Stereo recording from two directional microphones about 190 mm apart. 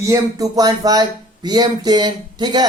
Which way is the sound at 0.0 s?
15° right (ahead or behind).